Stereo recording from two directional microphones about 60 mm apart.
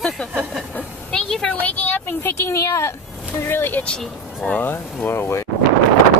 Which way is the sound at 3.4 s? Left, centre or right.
Left.